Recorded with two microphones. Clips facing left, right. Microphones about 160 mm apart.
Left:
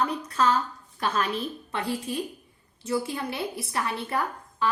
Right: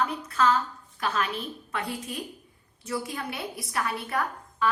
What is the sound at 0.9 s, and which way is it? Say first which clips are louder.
A woman's voice: left 2 dB; 35° left (ahead or behind).